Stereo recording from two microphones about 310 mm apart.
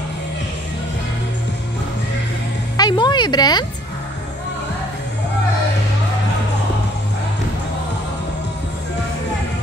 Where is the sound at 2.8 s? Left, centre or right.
Centre.